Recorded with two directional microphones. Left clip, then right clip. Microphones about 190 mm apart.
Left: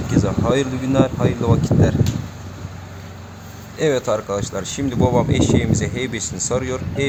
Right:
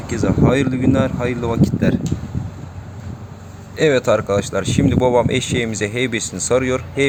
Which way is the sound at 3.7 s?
15° right (ahead or behind).